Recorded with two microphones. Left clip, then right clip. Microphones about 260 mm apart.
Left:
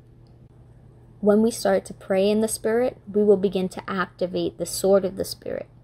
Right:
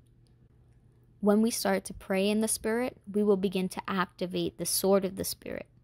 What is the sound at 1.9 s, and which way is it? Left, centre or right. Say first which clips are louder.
Speech: left 8 dB; right.